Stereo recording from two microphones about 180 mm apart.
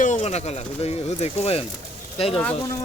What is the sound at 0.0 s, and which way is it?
Speech, 40° left (ahead or behind).